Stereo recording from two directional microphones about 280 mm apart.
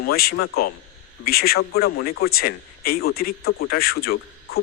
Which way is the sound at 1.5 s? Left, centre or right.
Left.